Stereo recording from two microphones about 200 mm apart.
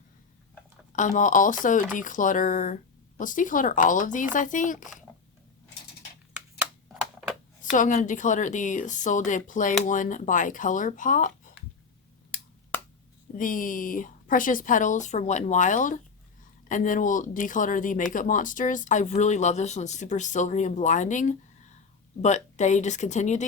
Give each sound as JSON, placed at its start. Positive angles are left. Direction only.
{"t": 0.9, "sound": "a woman's voice", "side_deg": 40}
{"t": 6.3, "sound": "a sound", "side_deg": -5}
{"t": 7.6, "sound": "a woman's voice", "side_deg": 40}
{"t": 13.3, "sound": "a woman's voice", "side_deg": 45}